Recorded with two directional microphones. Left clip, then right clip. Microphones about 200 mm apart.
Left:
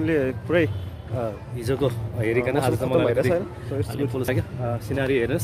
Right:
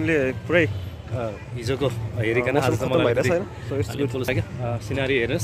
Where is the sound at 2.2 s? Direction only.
10° left (ahead or behind).